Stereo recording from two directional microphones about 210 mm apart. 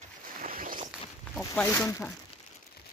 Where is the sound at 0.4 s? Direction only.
40° right (ahead or behind).